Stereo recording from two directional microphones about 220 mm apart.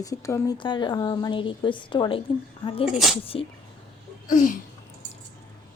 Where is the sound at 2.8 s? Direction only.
Centre (ahead or behind).